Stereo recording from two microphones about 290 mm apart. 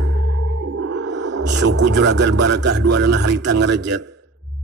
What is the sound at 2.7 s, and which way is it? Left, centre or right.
Speech, right.